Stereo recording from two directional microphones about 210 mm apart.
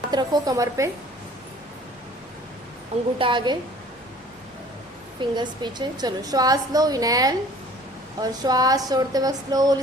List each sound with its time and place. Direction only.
0.1 s a woman's voice: 20° right (ahead or behind)
3.2 s a woman's voice: 25° right (ahead or behind)
5.3 s a woman's voice: 20° right (ahead or behind)